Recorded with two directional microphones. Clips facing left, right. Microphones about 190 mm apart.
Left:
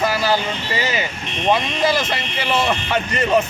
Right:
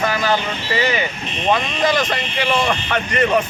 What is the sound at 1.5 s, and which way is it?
Speech, 5° left (ahead or behind).